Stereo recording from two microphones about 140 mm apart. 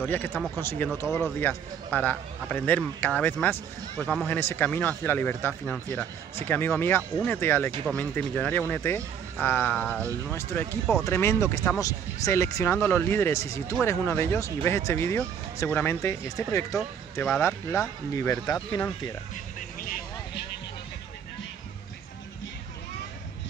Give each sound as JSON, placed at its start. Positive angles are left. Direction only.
{"t": 0.0, "sound": "speech", "side_deg": 15}